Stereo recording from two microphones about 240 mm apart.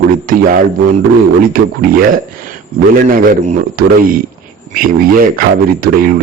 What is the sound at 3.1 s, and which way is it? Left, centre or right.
A man's voice, right.